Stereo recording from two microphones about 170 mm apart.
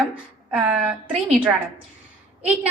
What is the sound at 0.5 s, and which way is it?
Speech, 5° right (ahead or behind).